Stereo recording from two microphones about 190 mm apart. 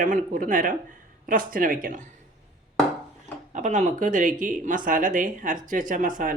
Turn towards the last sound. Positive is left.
turn(degrees=-45)  # may be behind; listen again after turning